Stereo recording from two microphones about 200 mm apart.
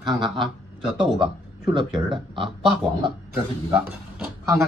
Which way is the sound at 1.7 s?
25° right (ahead or behind).